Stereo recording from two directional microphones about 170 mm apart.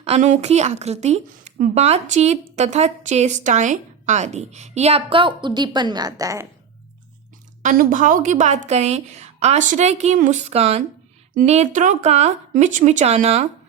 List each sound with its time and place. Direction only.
0.0 s speech: 40° right (ahead or behind); by 6.5 s 20° right (ahead or behind)
7.6 s a woman's voice: 50° right (ahead or behind)